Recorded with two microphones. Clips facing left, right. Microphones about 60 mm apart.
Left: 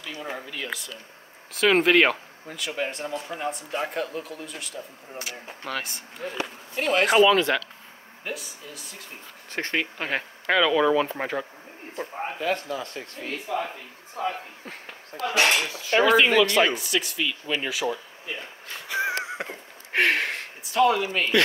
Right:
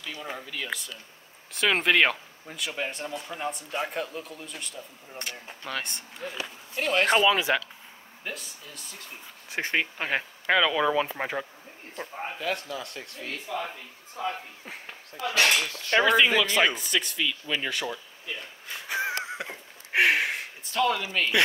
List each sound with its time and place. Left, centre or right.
0.1 s speech: centre
5.1 s speech: centre
7.3 s speech: centre
8.2 s speech: centre
9.5 s speech: centre
12.4 s speech: left
13.3 s speech: centre
14.1 s speech: centre
15.2 s speech: left
15.8 s speech: centre
18.2 s speech: left
19.1 s a sound: left
19.9 s a sound: centre
20.7 s speech: centre